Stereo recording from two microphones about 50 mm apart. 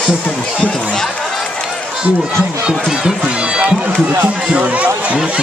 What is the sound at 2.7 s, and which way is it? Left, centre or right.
Speech, centre.